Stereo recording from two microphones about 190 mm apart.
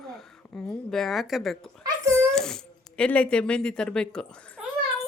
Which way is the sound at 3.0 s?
5° left (ahead or behind).